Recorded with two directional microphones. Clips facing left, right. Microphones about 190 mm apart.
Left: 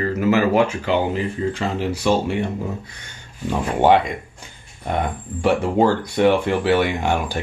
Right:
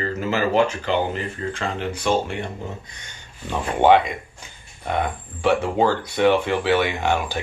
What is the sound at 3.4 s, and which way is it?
Speech, 10° left (ahead or behind).